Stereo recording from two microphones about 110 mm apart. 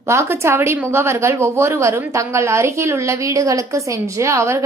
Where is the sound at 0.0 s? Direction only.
25° right (ahead or behind).